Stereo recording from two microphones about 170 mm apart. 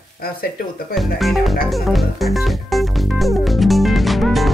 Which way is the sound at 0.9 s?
Centre (ahead or behind).